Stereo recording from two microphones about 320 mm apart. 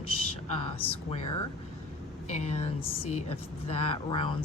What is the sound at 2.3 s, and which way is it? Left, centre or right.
A woman's voice, centre.